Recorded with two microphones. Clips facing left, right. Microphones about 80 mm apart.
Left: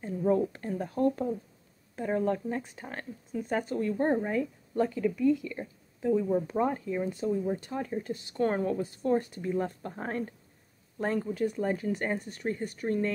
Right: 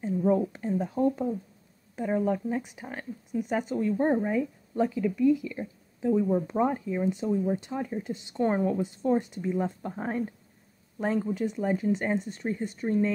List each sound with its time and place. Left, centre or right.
0.3 s speech: centre
2.0 s speech: centre
3.9 s speech: centre
7.1 s a woman's voice: centre